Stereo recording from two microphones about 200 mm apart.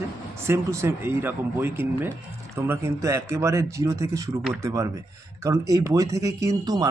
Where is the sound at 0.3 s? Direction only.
15° right (ahead or behind).